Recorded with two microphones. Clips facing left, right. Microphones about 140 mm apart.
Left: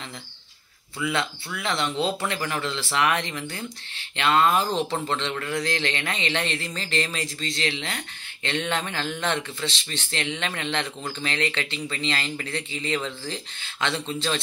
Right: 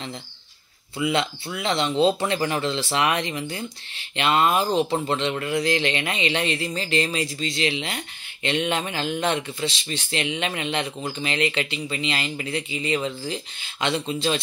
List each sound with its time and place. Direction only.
0.9 s speech: 20° right (ahead or behind)